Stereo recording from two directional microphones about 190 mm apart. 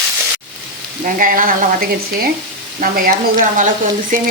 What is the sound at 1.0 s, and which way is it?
Speech, 45° right (ahead or behind).